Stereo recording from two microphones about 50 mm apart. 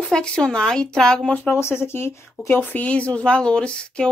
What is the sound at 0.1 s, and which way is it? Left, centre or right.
Speech, centre.